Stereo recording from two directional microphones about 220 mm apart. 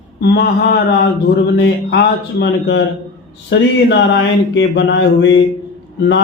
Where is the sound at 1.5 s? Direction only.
50° left (ahead or behind).